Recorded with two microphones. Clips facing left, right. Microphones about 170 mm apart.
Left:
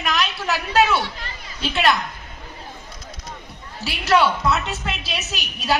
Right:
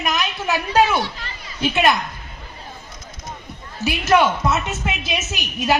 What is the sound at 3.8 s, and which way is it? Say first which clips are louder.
A woman's voice: right 2 dB; 20° right (ahead or behind).